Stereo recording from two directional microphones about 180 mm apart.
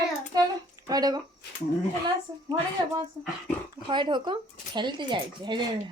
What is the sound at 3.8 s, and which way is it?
A woman's voice, 25° right (ahead or behind).